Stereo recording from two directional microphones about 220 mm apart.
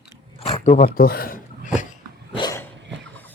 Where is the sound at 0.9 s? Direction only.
45° left (ahead or behind).